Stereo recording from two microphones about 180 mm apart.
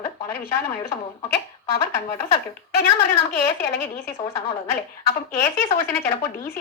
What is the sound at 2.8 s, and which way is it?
A woman's voice, 65° left (ahead or behind).